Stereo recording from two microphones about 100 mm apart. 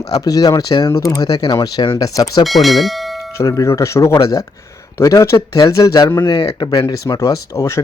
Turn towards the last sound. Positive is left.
turn(degrees=30)  # may be behind; listen again after turning